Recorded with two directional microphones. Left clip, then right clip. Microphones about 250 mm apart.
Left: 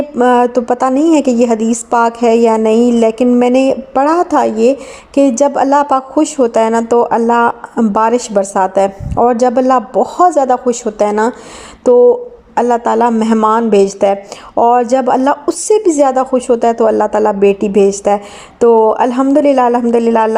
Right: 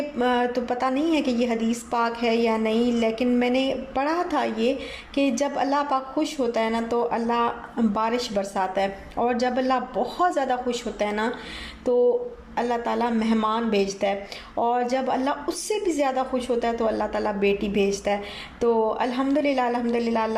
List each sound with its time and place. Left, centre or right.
0.2 s a woman's voice: left